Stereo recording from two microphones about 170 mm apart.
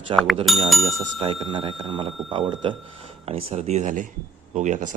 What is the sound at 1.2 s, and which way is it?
Speech, 30° right (ahead or behind).